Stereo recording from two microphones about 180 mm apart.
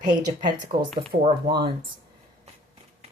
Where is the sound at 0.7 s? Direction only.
35° right (ahead or behind).